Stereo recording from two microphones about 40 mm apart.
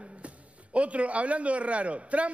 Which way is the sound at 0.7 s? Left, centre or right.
Right.